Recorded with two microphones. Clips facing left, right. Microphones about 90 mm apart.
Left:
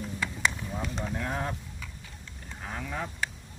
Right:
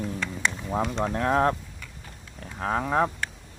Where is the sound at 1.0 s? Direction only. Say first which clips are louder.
Right 12 dB; 75° right (ahead or behind); by 3.1 s 60° right (ahead or behind).